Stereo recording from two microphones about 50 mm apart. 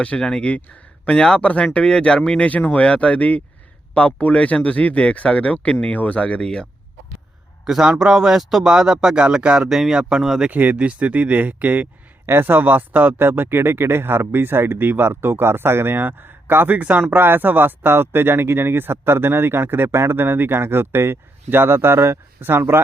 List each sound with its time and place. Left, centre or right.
0.2 s speech: centre
2.5 s speech: left
7.6 s a man's voice: centre
9.6 s a man's voice: centre
10.5 s speech: right
12.2 s speech: right
13.2 s speech: right